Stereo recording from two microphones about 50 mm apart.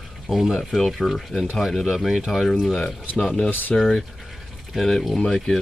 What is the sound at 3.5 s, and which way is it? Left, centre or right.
Speech, left.